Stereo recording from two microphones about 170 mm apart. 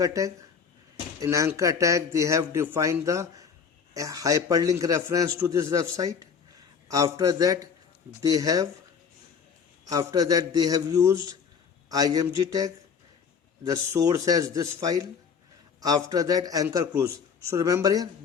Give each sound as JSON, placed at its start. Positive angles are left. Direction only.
{"t": 0.0, "sound": "a man's voice", "side_deg": -20}
{"t": 9.8, "sound": "a man's voice", "side_deg": -20}